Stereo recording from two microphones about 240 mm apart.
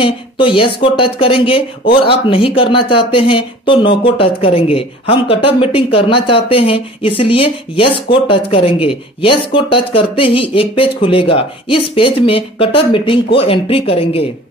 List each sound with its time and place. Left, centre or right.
0.0 s speech: left